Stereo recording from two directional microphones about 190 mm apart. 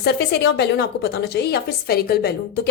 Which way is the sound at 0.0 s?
60° left (ahead or behind).